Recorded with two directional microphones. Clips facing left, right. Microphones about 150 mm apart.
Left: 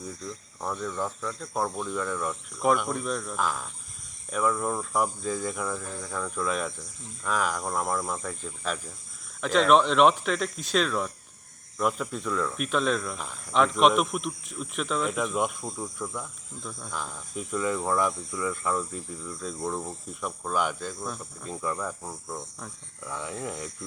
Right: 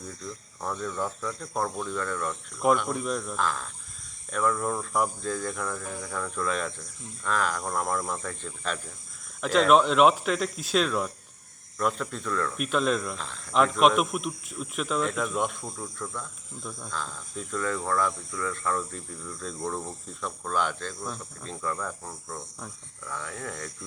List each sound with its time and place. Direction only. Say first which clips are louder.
0.3 s speech: right 1 dB; 5° left (ahead or behind)
3.3 s cricket: even; 10° left (ahead or behind)
4.3 s speech: even; 5° left (ahead or behind)
13.1 s cricket: even; 10° left (ahead or behind)
13.5 s speech: even; centre (ahead or behind)
16.9 s cricket: left 1 dB; 10° left (ahead or behind)